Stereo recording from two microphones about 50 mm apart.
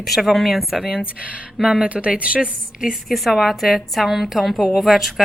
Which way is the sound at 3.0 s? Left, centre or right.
Centre.